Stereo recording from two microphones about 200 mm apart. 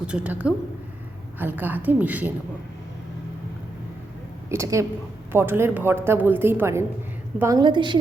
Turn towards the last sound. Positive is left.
turn(degrees=-25)  # may be behind; listen again after turning